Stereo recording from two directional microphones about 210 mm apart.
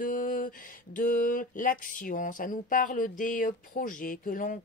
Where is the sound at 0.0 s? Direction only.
40° left (ahead or behind).